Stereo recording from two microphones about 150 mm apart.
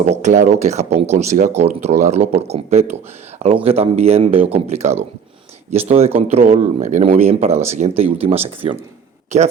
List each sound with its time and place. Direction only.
0.1 s speech: 55° right (ahead or behind)